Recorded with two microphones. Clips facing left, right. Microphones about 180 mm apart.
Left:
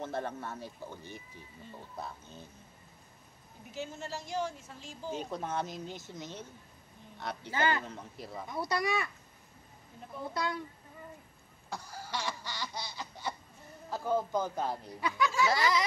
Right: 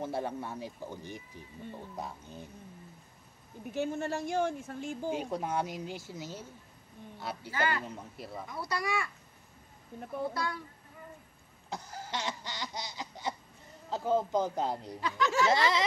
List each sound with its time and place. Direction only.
0.0 s speech: 10° right (ahead or behind)
3.7 s speech: 55° right (ahead or behind)
5.1 s speech: 10° right (ahead or behind)
7.5 s speech: 25° left (ahead or behind)
7.9 s speech: centre (ahead or behind)
8.5 s speech: 20° left (ahead or behind)
10.3 s speech: 20° left (ahead or behind)
11.7 s baby laughter: 20° right (ahead or behind)
13.8 s a man's voice: 20° right (ahead or behind)
15.0 s speech: 10° left (ahead or behind)
15.5 s a man's voice: 25° right (ahead or behind)